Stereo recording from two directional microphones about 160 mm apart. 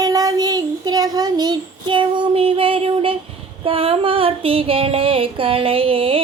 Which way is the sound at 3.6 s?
35° right (ahead or behind).